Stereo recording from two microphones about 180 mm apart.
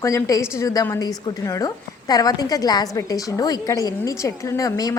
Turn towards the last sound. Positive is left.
turn(degrees=20)  # may be behind; listen again after turning